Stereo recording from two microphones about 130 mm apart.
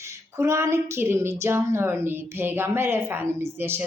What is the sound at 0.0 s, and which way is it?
A woman's voice, 20° right (ahead or behind).